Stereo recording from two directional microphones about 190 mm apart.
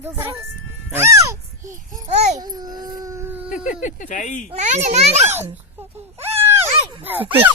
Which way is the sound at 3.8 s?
40° left (ahead or behind).